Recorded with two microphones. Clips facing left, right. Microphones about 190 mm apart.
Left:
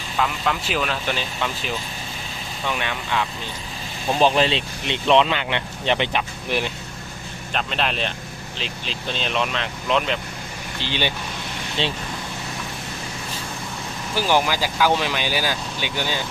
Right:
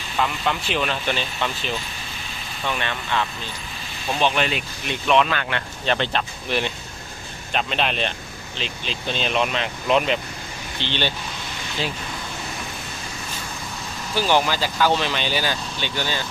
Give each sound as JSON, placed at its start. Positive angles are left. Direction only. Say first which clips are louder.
{"t": 0.2, "sound": "speech", "louder": "even", "side_deg": 0}
{"t": 4.1, "sound": "speech", "louder": "left 4 dB", "side_deg": 35}
{"t": 7.5, "sound": "speech", "louder": "right 1 dB", "side_deg": 0}
{"t": 10.8, "sound": "speech", "louder": "even", "side_deg": 5}
{"t": 11.8, "sound": "speech", "louder": "left 2 dB", "side_deg": 30}
{"t": 14.2, "sound": "speech", "louder": "even", "side_deg": 10}